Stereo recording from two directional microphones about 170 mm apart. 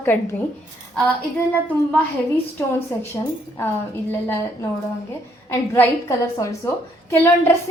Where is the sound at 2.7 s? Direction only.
15° left (ahead or behind).